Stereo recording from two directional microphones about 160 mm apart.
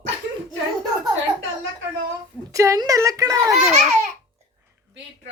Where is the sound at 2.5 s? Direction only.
20° right (ahead or behind).